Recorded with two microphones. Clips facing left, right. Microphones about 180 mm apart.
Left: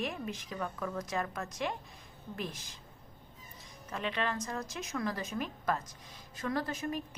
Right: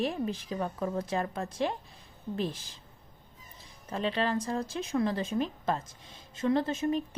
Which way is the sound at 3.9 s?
30° right (ahead or behind).